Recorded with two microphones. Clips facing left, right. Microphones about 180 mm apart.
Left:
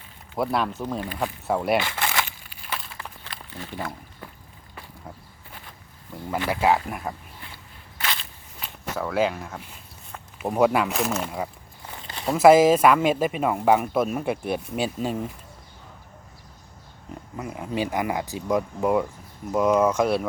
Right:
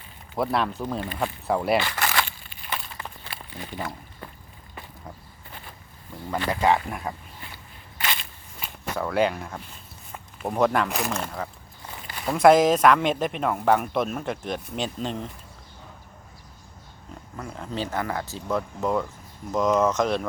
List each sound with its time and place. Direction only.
0.3 s speech: centre (ahead or behind)
2.0 s walk: 10° left (ahead or behind); by 3.7 s 10° right (ahead or behind)
3.8 s a sound: 5° left (ahead or behind)
6.3 s speech: 10° left (ahead or behind)
7.9 s walk: 10° right (ahead or behind)
8.6 s speech: centre (ahead or behind)
12.0 s walk: 25° left (ahead or behind)
12.3 s speech: 5° left (ahead or behind)
17.3 s speech: 10° left (ahead or behind)